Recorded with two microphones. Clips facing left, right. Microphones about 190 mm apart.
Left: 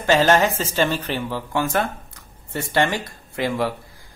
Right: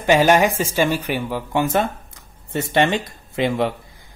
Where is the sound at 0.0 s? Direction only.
15° right (ahead or behind).